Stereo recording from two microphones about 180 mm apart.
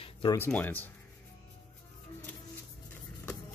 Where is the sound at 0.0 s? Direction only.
25° left (ahead or behind).